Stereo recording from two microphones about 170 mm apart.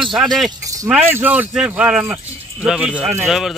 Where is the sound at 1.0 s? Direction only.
10° right (ahead or behind).